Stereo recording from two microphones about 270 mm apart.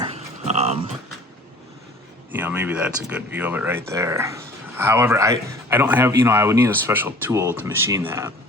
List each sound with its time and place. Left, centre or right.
0.0 s dog: centre
2.3 s a man's voice: centre